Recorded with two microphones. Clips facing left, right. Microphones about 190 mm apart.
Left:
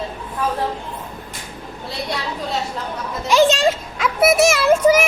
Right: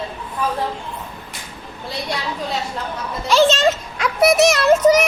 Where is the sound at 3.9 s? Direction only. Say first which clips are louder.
Right 1 dB; 5° left (ahead or behind).